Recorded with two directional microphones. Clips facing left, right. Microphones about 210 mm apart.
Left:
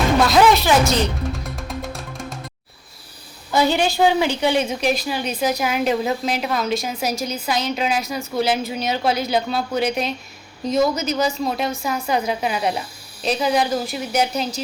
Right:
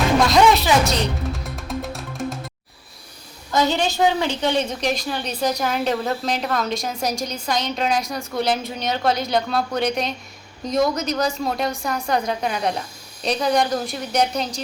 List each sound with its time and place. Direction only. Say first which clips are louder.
0.3 s a woman's voice: left 1 dB; centre (ahead or behind)
1.5 s music: right 1 dB; centre (ahead or behind)
3.5 s a woman's voice: left 2 dB; 10° left (ahead or behind)